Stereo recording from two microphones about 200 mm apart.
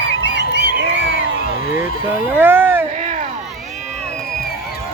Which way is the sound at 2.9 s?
40° right (ahead or behind).